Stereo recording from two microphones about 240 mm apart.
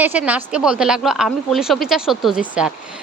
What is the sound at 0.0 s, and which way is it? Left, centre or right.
Speech, centre.